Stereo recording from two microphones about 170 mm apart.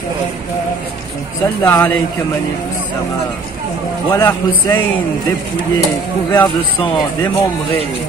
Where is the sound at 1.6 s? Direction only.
15° left (ahead or behind).